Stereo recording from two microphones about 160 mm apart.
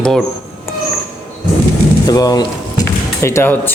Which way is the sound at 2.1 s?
25° left (ahead or behind).